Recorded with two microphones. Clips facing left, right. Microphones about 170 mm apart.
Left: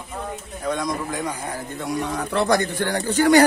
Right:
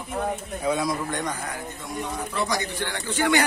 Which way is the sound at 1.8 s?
70° left (ahead or behind).